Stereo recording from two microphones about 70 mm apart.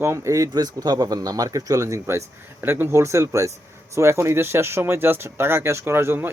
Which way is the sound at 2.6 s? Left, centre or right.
Right.